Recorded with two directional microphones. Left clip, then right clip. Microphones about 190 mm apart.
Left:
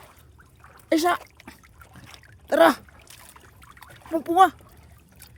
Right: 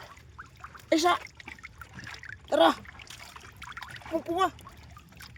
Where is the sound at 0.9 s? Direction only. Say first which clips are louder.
Left 3 dB; 55° left (ahead or behind).